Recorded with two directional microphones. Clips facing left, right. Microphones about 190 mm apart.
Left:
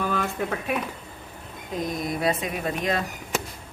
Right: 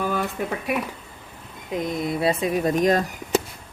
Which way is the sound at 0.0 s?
10° right (ahead or behind).